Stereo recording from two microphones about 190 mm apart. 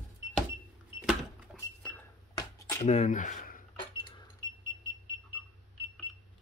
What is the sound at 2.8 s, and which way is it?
Speech, 35° left (ahead or behind).